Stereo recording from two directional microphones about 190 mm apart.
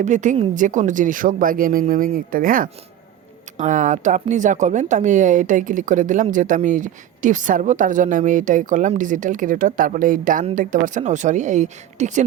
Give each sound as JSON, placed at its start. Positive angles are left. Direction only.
{"t": 0.0, "sound": "speech", "side_deg": -40}